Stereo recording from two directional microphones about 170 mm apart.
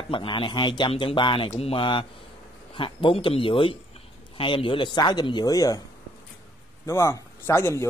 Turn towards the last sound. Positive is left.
turn(degrees=15)  # may be behind; listen again after turning